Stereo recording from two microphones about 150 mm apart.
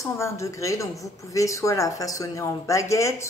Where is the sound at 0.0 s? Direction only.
20° left (ahead or behind).